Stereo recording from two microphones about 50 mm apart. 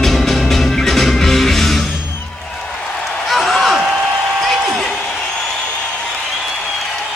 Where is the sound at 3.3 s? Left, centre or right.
Centre.